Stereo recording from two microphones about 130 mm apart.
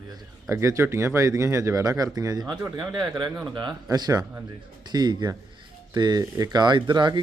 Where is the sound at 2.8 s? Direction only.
5° right (ahead or behind).